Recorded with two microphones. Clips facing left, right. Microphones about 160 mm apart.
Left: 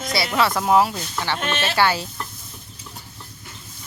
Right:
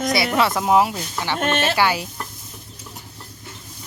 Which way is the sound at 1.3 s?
50° right (ahead or behind).